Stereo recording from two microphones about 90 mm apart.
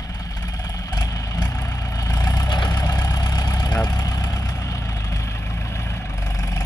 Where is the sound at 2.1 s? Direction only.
45° left (ahead or behind).